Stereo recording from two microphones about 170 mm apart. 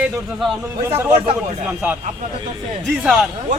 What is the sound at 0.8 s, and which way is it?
Speech, 10° right (ahead or behind).